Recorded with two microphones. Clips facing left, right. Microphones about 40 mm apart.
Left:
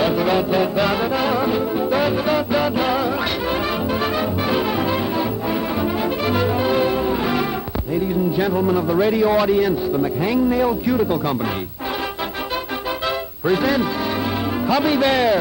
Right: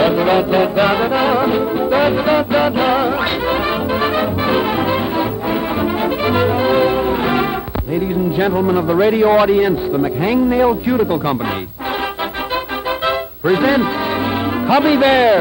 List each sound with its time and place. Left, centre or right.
0.0 s music: right
7.9 s heart sounds: right
8.5 s a man's voice: right
13.5 s a man's voice: right